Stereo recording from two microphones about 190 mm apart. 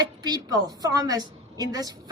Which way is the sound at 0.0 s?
20° right (ahead or behind).